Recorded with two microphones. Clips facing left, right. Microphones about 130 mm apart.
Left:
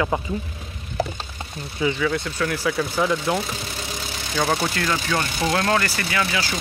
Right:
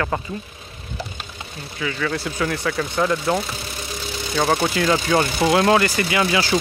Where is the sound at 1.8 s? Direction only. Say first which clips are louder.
Left 4 dB; 25° left (ahead or behind).